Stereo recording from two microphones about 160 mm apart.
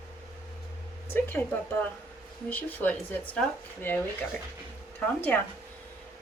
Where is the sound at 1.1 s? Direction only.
15° left (ahead or behind).